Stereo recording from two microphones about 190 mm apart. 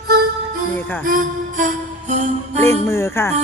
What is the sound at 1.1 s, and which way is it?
Music, 45° right (ahead or behind).